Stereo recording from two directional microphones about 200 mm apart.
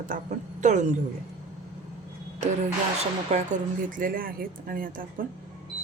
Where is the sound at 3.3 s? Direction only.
35° right (ahead or behind).